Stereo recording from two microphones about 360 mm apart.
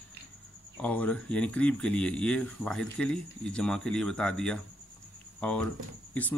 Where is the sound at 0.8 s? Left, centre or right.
Centre.